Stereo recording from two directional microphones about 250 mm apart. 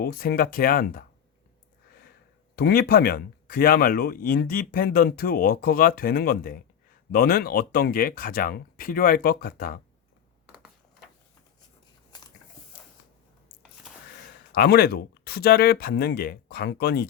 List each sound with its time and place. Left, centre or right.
0.0 s speech: left
2.6 s speech: left
14.5 s speech: left